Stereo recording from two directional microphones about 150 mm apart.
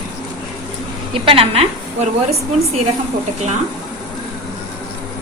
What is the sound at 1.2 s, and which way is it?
Speech, 40° right (ahead or behind).